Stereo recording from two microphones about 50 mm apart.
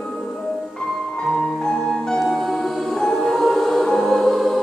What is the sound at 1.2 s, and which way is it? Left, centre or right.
Music, centre.